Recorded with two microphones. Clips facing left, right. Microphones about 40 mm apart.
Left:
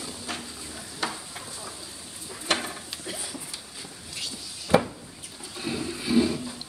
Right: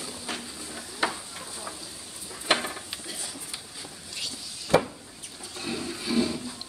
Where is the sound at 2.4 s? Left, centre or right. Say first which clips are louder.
Right 2 dB; centre.